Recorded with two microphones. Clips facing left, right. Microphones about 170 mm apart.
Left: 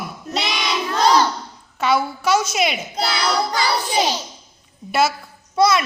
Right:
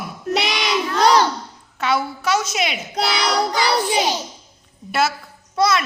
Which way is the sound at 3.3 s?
15° right (ahead or behind).